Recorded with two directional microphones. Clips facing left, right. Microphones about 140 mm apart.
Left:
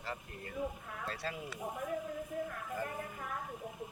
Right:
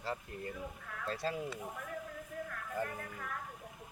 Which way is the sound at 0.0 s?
30° right (ahead or behind).